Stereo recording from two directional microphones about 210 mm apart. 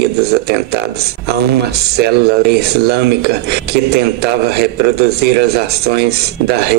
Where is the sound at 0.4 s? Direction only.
50° right (ahead or behind).